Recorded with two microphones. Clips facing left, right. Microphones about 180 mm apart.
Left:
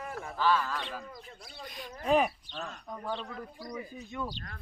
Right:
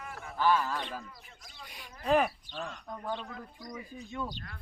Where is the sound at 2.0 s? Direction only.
15° left (ahead or behind).